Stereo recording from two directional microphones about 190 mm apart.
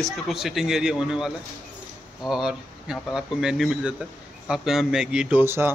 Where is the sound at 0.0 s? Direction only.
Centre (ahead or behind).